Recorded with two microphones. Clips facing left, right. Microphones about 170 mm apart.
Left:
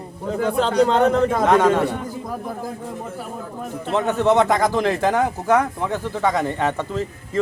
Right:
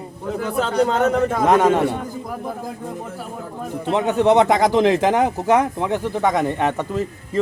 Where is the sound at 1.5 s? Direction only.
15° right (ahead or behind).